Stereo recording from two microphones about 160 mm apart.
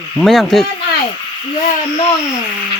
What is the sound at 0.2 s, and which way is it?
Speech, centre (ahead or behind).